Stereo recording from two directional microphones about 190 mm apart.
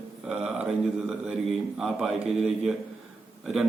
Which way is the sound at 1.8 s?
Centre (ahead or behind).